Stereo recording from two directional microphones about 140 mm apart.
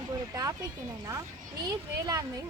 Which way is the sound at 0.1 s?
25° right (ahead or behind).